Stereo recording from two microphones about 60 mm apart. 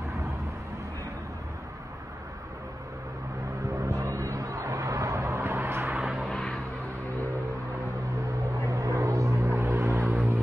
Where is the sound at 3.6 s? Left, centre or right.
Right.